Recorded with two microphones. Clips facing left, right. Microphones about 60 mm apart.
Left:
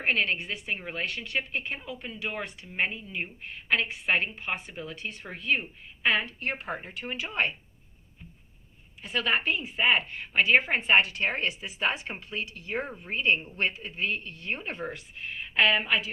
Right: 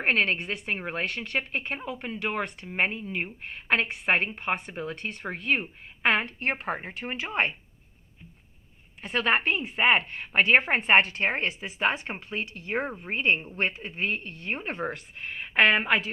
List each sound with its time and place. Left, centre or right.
0.0 s a woman's voice: right
6.7 s a woman's voice: right
9.0 s a woman's voice: right
14.8 s a woman's voice: right